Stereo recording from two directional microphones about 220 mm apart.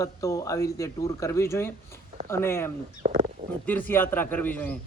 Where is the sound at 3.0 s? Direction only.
30° right (ahead or behind).